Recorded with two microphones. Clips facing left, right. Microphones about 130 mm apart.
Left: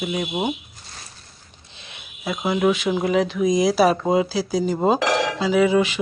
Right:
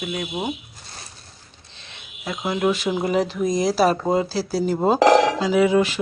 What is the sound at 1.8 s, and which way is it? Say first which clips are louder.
Speech: left 3 dB; 5° left (ahead or behind).